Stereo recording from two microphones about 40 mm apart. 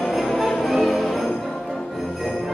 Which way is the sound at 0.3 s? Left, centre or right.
Centre.